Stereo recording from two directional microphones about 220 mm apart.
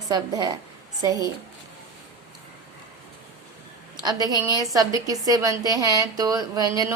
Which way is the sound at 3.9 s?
20° right (ahead or behind).